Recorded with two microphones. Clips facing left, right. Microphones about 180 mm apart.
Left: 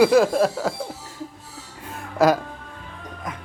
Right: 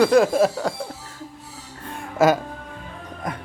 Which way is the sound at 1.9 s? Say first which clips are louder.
Even; centre (ahead or behind).